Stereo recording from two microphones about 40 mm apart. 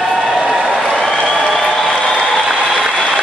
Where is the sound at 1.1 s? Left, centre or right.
Left.